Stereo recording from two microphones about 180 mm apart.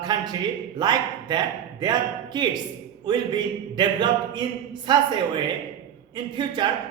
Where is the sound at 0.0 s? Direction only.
25° right (ahead or behind).